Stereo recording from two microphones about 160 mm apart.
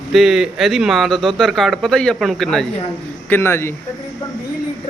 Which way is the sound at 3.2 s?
15° left (ahead or behind).